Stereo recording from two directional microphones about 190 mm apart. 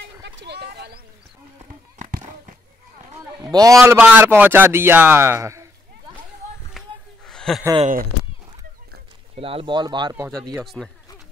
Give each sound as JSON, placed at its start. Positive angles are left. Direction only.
{"t": 0.0, "sound": "speech", "side_deg": -65}
{"t": 2.0, "sound": "a sound", "side_deg": -40}
{"t": 3.3, "sound": "a man's voice", "side_deg": -20}
{"t": 6.8, "sound": "a sound", "side_deg": 0}
{"t": 7.8, "sound": "speech", "side_deg": -45}
{"t": 9.3, "sound": "speech", "side_deg": -30}
{"t": 10.6, "sound": "speech", "side_deg": 0}